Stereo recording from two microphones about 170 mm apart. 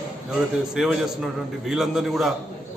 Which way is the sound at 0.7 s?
5° right (ahead or behind).